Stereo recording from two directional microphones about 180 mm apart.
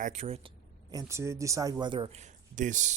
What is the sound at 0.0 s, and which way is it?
Speech, 40° right (ahead or behind).